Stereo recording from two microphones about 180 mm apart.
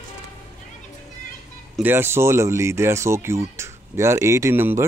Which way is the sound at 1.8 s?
10° right (ahead or behind).